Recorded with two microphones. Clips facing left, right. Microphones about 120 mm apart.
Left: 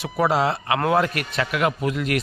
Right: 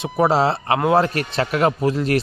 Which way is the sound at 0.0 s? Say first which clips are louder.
Right 3 dB; 25° right (ahead or behind).